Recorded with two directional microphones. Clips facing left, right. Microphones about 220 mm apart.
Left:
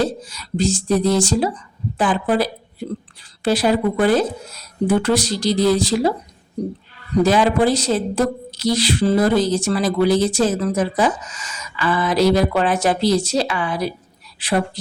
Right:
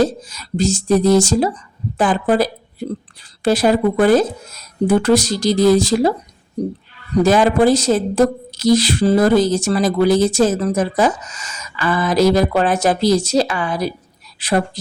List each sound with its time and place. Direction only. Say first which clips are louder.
0.0 s a woman's voice: right 4 dB; 45° right (ahead or behind)